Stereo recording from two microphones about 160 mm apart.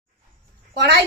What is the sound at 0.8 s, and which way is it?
Speech, 90° right.